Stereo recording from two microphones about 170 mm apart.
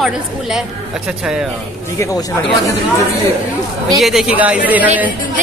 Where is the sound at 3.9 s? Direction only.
Centre (ahead or behind).